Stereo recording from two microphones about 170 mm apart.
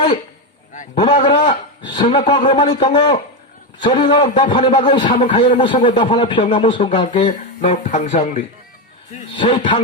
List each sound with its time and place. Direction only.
1.2 s a man's voice: 30° left (ahead or behind)
7.7 s speech: 45° left (ahead or behind)
9.3 s speech: 30° left (ahead or behind)